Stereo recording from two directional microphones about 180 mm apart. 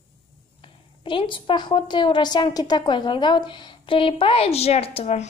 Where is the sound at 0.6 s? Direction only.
30° left (ahead or behind).